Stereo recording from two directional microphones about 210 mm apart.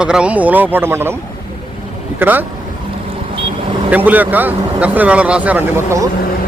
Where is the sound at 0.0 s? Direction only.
5° right (ahead or behind).